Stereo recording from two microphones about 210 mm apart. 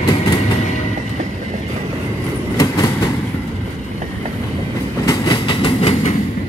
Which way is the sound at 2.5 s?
20° left (ahead or behind).